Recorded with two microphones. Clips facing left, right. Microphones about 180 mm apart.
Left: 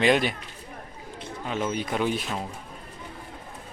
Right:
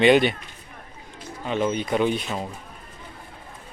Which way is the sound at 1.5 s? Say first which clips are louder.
Right 5 dB; centre (ahead or behind).